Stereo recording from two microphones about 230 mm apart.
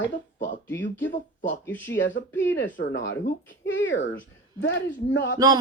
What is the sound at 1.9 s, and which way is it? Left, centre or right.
Speech, left.